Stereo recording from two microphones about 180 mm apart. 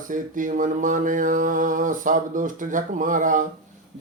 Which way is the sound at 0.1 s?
45° right (ahead or behind).